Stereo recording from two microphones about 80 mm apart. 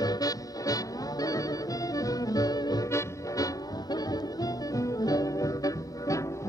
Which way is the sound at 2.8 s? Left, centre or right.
Left.